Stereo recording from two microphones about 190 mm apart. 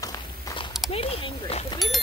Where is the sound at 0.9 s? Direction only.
30° left (ahead or behind).